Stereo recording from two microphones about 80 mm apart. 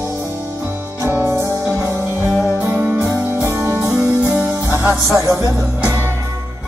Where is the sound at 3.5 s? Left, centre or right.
Right.